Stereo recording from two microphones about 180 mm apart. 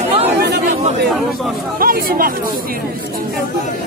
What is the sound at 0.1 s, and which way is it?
Chatter, 35° right (ahead or behind).